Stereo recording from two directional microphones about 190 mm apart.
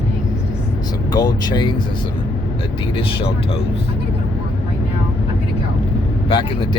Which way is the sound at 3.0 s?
25° left (ahead or behind).